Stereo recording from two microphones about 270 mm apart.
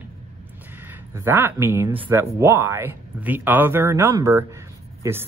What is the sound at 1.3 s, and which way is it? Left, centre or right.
Speech, centre.